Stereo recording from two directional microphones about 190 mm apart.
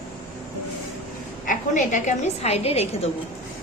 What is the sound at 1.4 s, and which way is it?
A woman's voice, 45° left (ahead or behind).